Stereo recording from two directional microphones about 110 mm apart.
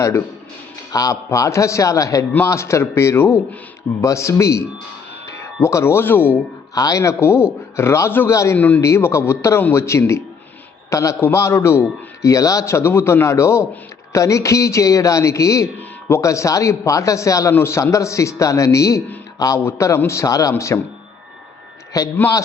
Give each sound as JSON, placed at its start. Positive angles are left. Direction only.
{"t": 0.9, "sound": "a man's voice", "side_deg": 30}
{"t": 6.7, "sound": "a man's voice", "side_deg": 30}
{"t": 8.5, "sound": "a man's voice", "side_deg": 15}
{"t": 19.6, "sound": "a man's voice", "side_deg": 25}
{"t": 21.9, "sound": "a man's voice", "side_deg": 35}